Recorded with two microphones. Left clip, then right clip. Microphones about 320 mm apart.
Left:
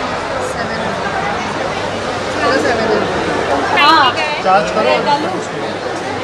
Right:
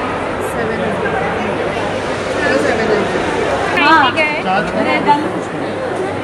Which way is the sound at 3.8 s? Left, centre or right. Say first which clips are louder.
Even; centre.